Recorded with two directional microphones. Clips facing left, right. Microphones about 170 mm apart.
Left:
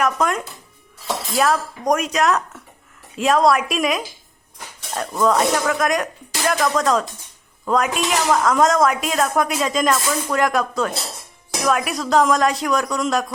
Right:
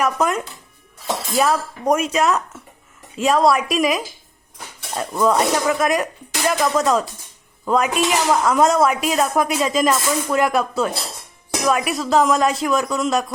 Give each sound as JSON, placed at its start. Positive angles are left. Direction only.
{"t": 0.0, "sound": "a woman's voice", "side_deg": -5}
{"t": 5.1, "sound": "a woman's voice", "side_deg": -5}